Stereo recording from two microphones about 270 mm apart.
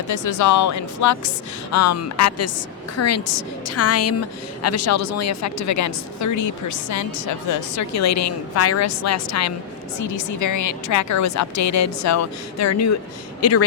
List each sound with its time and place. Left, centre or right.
0.1 s a woman's voice: left
1.7 s a woman's voice: left
10.0 s a woman's voice: left
13.4 s a woman's voice: left